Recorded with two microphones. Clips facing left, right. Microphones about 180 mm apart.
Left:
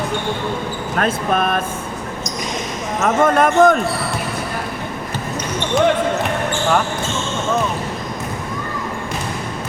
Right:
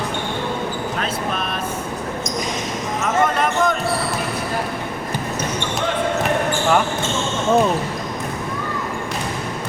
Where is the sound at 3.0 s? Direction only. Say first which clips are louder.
Left 5 dB; 50° left (ahead or behind).